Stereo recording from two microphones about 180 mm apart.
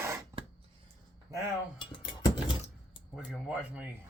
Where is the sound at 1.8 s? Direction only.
25° left (ahead or behind).